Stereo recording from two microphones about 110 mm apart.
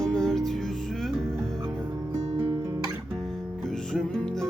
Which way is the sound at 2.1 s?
85° right.